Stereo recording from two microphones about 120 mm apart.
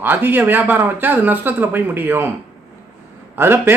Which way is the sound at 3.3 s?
20° right (ahead or behind).